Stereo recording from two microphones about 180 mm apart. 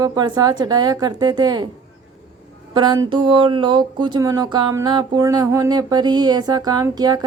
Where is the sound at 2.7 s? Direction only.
25° right (ahead or behind).